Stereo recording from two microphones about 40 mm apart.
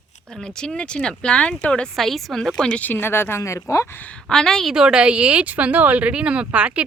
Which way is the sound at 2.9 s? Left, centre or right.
Left.